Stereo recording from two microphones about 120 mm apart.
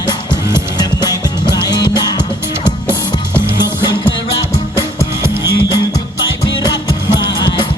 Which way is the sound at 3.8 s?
35° left (ahead or behind).